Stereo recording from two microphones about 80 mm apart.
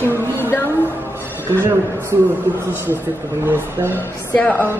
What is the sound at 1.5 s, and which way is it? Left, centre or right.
Speech, right.